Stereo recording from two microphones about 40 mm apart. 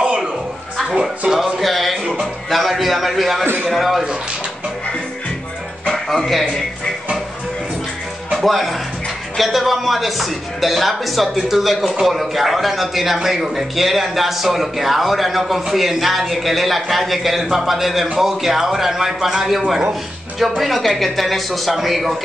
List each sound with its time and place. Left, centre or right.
0.8 s music: centre
1.6 s music: centre
2.5 s a man's voice: centre
6.0 s a man's voice: centre
8.4 s a man's voice: centre